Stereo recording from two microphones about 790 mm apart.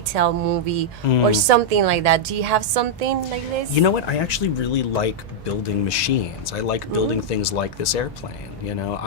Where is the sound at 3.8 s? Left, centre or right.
Left.